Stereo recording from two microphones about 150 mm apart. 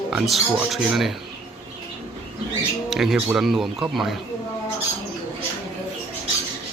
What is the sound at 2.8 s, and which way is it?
Speech, centre (ahead or behind).